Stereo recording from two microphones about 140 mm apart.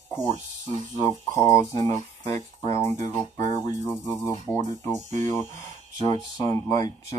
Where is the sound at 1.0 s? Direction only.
20° left (ahead or behind).